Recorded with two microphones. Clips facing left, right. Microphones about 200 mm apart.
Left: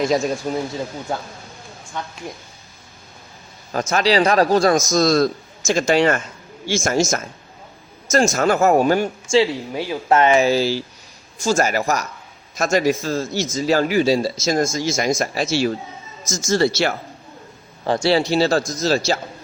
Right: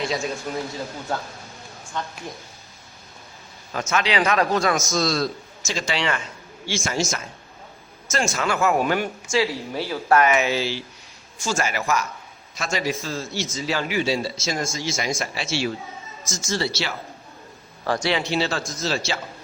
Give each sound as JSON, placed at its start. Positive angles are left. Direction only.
{"t": 0.0, "sound": "a man's voice", "side_deg": 45}
{"t": 3.7, "sound": "a man's voice", "side_deg": 40}
{"t": 4.9, "sound": "a man's voice", "side_deg": 45}
{"t": 9.7, "sound": "a man's voice", "side_deg": 15}
{"t": 17.8, "sound": "a man's voice", "side_deg": 25}